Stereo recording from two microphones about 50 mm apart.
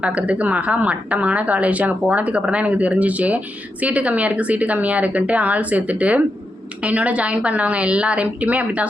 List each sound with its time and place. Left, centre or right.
0.0 s speech: right